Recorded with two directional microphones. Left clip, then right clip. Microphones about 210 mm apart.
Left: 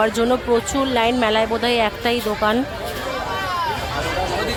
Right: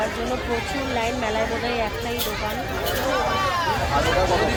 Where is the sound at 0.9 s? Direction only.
25° left (ahead or behind).